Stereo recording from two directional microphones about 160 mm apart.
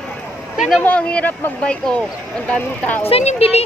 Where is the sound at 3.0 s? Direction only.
40° left (ahead or behind).